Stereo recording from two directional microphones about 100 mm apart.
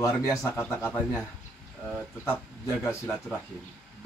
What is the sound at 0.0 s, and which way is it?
Speech, 30° left (ahead or behind).